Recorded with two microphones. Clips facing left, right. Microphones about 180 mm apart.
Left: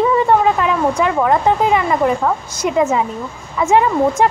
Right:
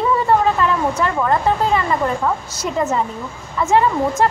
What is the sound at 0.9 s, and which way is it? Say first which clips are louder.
A woman's voice: left 3 dB; 10° left (ahead or behind).